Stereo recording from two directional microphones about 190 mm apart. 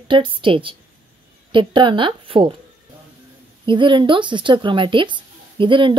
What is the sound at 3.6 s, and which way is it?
Speech, 25° right (ahead or behind).